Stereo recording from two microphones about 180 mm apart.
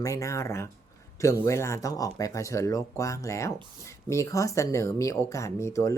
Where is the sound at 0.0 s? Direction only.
15° left (ahead or behind).